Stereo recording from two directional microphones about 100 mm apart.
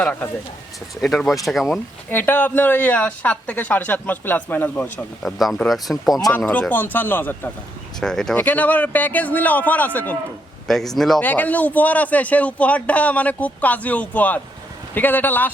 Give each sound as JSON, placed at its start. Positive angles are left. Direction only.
{"t": 0.0, "sound": "speech", "side_deg": 15}
{"t": 1.0, "sound": "speech", "side_deg": 0}
{"t": 2.0, "sound": "speech", "side_deg": 20}
{"t": 4.8, "sound": "speech", "side_deg": 0}
{"t": 6.3, "sound": "speech", "side_deg": 15}
{"t": 8.0, "sound": "speech", "side_deg": 5}
{"t": 8.4, "sound": "speech", "side_deg": 15}
{"t": 10.7, "sound": "speech", "side_deg": 5}
{"t": 11.2, "sound": "speech", "side_deg": 15}